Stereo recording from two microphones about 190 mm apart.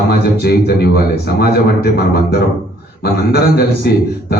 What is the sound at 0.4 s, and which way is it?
A man's voice, 55° left (ahead or behind).